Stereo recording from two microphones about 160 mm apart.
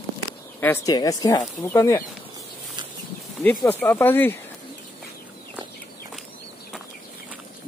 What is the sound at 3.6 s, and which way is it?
Speech, 10° left (ahead or behind).